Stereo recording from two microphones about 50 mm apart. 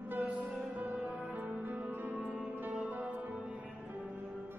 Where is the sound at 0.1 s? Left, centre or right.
Right.